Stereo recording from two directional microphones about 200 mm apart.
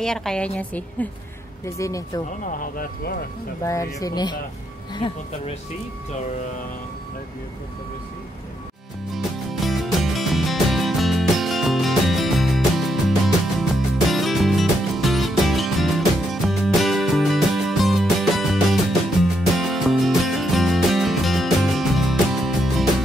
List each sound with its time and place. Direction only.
0.0 s a woman's voice: centre (ahead or behind)
2.2 s speech: 40° left (ahead or behind)
3.6 s speech: 15° left (ahead or behind)
9.1 s music: centre (ahead or behind)